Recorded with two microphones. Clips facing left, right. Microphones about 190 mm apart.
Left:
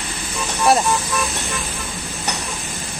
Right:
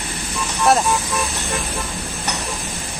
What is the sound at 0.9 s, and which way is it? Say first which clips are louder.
Speech: even; 15° right (ahead or behind).